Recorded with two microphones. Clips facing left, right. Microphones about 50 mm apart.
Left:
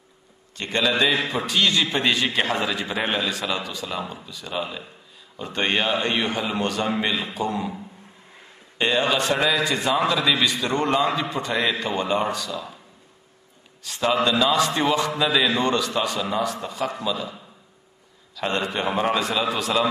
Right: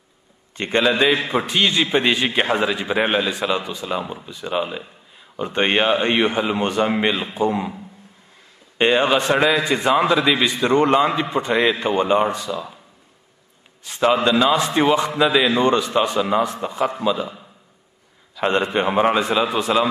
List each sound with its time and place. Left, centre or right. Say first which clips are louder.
0.6 s a man's voice: right 4 dB; right
8.7 s a man's voice: right 5 dB; right
13.8 s a man's voice: right 4 dB; right